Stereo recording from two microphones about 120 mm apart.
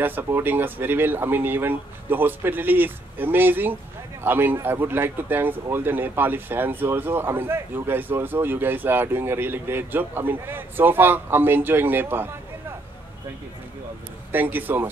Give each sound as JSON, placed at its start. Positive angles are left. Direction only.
{"t": 0.0, "sound": "speech", "side_deg": -15}
{"t": 14.3, "sound": "speech", "side_deg": -15}